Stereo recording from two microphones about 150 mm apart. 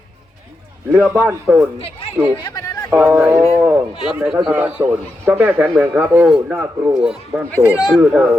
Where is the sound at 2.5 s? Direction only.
20° left (ahead or behind).